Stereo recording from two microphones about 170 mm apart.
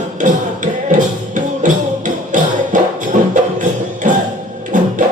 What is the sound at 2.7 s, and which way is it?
Music, 50° right (ahead or behind).